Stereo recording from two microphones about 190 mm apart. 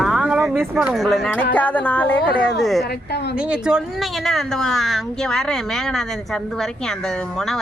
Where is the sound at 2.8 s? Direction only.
60° left (ahead or behind).